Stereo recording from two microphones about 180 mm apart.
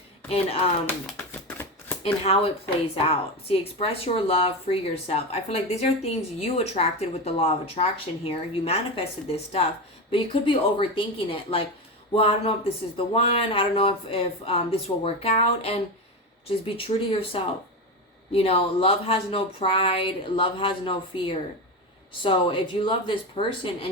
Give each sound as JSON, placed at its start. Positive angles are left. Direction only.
{"t": 0.9, "sound": "shuffling cards", "side_deg": 10}
{"t": 2.3, "sound": "speech", "side_deg": 35}